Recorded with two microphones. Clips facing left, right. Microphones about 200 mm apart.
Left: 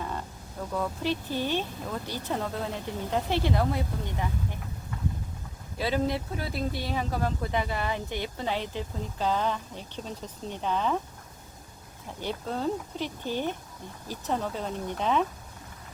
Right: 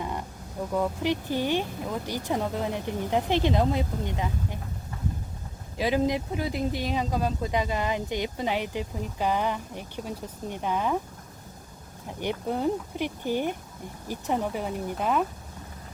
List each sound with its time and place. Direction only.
0.0 s vehicle: 15° right (ahead or behind)
0.7 s speech: 15° right (ahead or behind)
5.7 s speech: 15° right (ahead or behind)
12.2 s speech: 15° right (ahead or behind)